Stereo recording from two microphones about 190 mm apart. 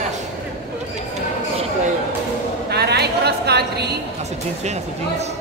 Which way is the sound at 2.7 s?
60° right (ahead or behind).